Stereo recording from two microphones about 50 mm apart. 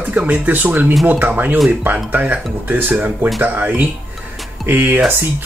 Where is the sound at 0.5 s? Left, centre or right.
Right.